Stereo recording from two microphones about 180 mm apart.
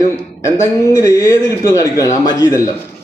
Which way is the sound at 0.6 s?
15° left (ahead or behind).